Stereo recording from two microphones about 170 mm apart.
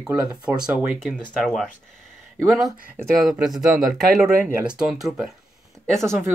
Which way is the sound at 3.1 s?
Centre (ahead or behind).